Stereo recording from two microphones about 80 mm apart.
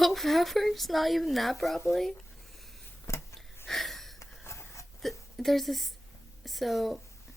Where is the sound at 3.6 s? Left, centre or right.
Centre.